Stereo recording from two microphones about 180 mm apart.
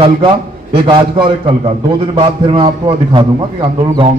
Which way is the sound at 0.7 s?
25° right (ahead or behind).